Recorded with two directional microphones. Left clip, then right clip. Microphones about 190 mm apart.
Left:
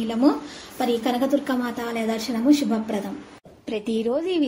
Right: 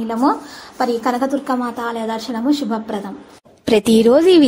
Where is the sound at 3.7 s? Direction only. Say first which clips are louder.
Right 13 dB; 70° right (ahead or behind).